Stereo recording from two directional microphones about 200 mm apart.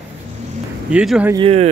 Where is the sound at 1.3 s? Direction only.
30° right (ahead or behind).